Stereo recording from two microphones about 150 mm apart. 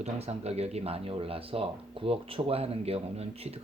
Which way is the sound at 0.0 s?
45° right (ahead or behind).